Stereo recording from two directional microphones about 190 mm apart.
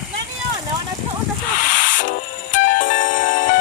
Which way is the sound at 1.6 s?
45° left (ahead or behind).